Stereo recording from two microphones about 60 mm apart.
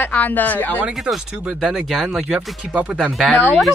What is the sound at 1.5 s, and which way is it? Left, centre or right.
Speech, centre.